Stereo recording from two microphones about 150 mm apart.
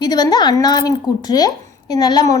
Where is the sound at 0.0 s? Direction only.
25° left (ahead or behind).